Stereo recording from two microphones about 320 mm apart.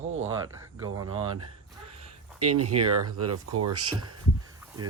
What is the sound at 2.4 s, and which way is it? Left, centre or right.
Speech, right.